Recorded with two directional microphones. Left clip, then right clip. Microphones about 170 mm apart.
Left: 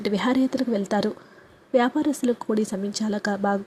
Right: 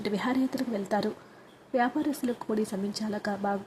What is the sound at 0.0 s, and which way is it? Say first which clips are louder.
A woman's voice: left 6 dB; 20° left (ahead or behind).